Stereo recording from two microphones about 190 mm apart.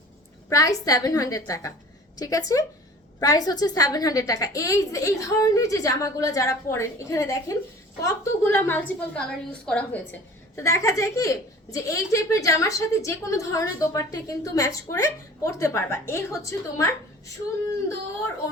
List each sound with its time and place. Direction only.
0.5 s a woman's voice: 15° left (ahead or behind)